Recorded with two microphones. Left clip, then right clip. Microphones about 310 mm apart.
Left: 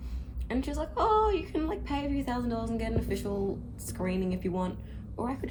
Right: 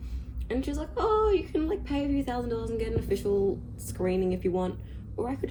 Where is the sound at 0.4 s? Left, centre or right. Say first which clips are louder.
Right 1 dB; centre.